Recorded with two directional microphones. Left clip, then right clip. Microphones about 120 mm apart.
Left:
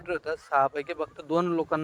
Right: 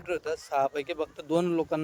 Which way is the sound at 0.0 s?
25° right (ahead or behind).